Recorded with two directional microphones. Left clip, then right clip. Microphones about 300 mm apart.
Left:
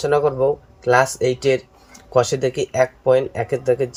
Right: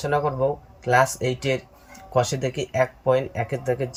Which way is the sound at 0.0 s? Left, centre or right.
Centre.